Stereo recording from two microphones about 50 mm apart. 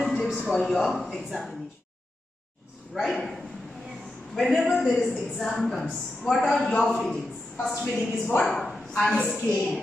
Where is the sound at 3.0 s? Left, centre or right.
Centre.